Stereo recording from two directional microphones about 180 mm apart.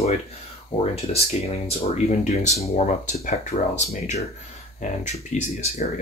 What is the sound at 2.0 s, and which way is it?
Speech, 40° left (ahead or behind).